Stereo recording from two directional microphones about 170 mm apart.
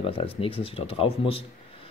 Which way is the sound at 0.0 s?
30° left (ahead or behind).